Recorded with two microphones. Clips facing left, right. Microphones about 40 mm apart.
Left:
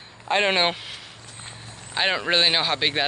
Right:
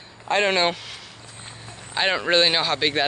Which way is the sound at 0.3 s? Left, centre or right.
Centre.